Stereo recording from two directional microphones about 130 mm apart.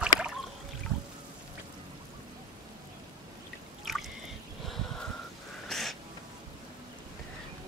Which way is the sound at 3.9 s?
Centre (ahead or behind).